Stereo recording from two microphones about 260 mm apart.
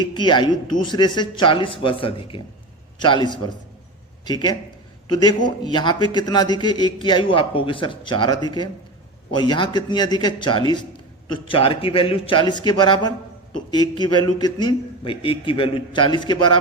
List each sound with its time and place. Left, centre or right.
0.0 s a man's voice: centre